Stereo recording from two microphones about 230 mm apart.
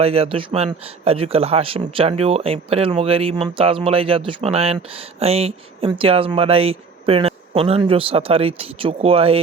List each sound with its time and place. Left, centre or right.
0.0 s speech: right